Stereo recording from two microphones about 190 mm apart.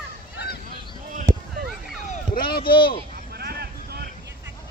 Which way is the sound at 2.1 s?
50° left (ahead or behind).